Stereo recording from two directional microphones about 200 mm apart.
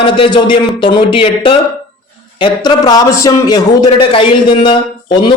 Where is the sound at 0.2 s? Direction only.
25° left (ahead or behind).